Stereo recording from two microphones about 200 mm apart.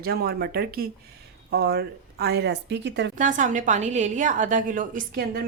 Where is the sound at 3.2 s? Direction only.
40° right (ahead or behind).